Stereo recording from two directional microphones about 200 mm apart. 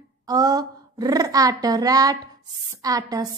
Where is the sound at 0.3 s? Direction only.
20° right (ahead or behind).